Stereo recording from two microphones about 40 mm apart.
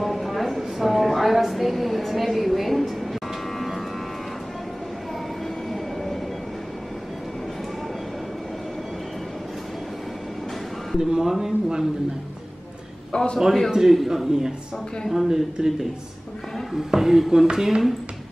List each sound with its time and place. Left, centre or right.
0.0 s a sound: centre
11.0 s speech: centre
13.1 s a man's voice: left
13.7 s speech: centre